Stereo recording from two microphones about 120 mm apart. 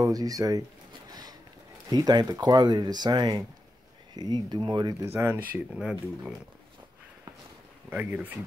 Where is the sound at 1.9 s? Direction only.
35° right (ahead or behind).